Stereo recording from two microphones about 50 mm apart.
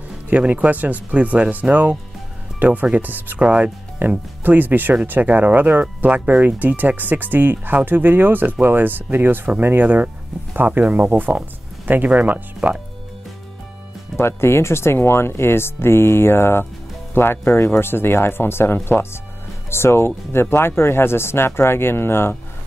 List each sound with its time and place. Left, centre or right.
0.3 s speech: right
3.3 s speech: right
4.0 s speech: right
14.2 s speech: left